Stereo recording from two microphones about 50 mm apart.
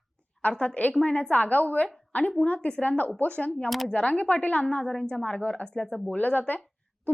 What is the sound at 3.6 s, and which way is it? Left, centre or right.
Speech, centre.